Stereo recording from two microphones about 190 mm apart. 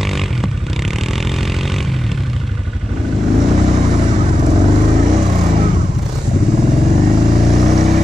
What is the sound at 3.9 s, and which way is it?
Vehicle, 40° right (ahead or behind).